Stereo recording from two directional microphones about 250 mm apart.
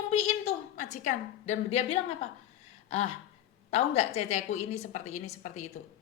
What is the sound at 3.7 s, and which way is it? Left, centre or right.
Speech, left.